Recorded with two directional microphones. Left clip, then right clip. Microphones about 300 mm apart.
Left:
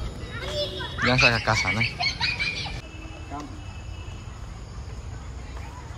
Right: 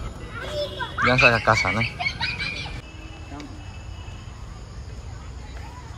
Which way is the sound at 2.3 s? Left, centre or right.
Left.